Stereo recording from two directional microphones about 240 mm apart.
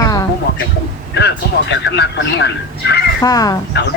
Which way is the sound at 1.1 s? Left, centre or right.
Left.